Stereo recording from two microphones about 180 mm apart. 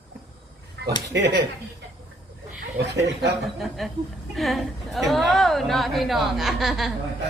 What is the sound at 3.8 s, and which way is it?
A woman's voice, centre (ahead or behind).